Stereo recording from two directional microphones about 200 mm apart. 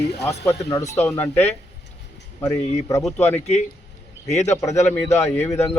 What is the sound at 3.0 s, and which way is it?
Speech, 5° left (ahead or behind).